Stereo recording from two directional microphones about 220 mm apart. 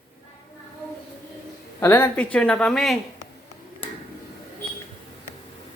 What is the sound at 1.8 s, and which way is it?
Speech, 10° left (ahead or behind).